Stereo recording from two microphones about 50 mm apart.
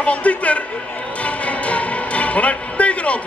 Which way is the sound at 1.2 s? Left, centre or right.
Left.